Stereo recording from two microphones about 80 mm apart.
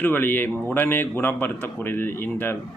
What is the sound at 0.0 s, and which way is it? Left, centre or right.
A man's voice, left.